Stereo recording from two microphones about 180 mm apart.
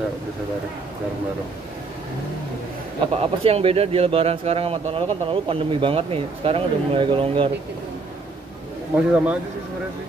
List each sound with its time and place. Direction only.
3.1 s speech: 35° right (ahead or behind)
8.9 s a man's voice: 5° right (ahead or behind)